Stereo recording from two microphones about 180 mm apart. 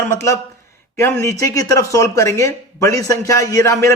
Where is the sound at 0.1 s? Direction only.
15° left (ahead or behind).